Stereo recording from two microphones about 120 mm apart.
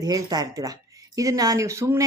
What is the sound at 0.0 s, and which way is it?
Speech, 35° right (ahead or behind).